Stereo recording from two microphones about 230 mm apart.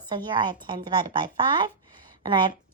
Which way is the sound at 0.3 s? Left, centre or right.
Centre.